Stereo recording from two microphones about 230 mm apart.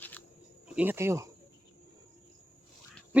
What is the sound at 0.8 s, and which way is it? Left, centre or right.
Speech, centre.